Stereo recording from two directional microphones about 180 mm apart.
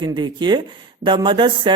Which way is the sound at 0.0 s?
25° right (ahead or behind).